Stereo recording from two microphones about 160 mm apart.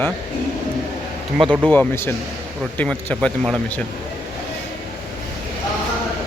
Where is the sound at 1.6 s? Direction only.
10° left (ahead or behind).